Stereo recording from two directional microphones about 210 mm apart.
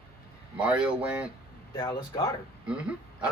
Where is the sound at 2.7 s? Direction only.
5° right (ahead or behind).